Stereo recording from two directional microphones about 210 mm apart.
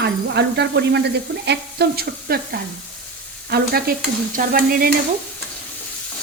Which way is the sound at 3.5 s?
45° right (ahead or behind).